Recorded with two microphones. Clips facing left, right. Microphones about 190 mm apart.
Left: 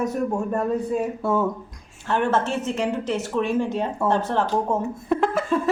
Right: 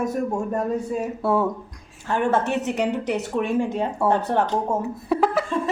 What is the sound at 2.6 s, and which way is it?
Speech, 70° right (ahead or behind).